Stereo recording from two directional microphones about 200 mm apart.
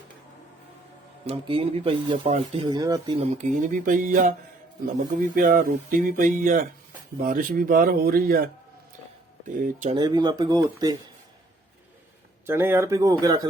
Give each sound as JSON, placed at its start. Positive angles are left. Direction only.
{"t": 1.3, "sound": "speech", "side_deg": -30}
{"t": 3.3, "sound": "speech", "side_deg": -40}
{"t": 9.6, "sound": "speech", "side_deg": -40}
{"t": 9.9, "sound": "speech", "side_deg": -20}
{"t": 12.5, "sound": "speech", "side_deg": -10}